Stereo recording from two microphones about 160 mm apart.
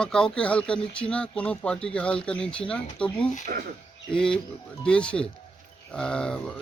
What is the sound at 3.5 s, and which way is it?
Speech, 65° right (ahead or behind).